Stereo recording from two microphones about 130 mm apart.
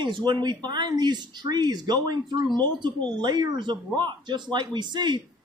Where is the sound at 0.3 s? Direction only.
35° right (ahead or behind).